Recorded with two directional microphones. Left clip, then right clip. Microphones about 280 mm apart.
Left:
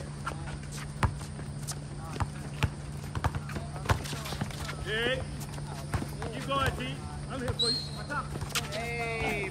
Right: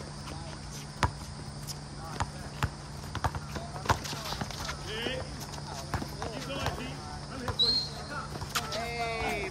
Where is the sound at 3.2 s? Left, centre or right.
Centre.